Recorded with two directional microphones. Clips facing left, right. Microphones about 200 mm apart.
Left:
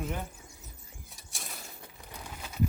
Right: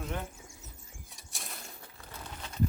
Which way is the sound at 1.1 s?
Centre (ahead or behind).